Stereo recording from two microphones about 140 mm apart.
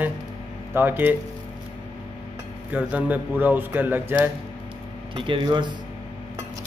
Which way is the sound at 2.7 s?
10° right (ahead or behind).